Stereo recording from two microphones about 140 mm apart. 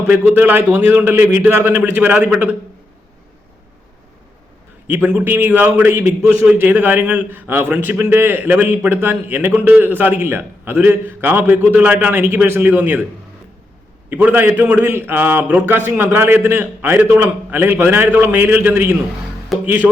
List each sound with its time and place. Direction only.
0.1 s a man's voice: 10° right (ahead or behind)
4.9 s a man's voice: 10° right (ahead or behind)
14.1 s a man's voice: 15° right (ahead or behind)
19.5 s music: centre (ahead or behind)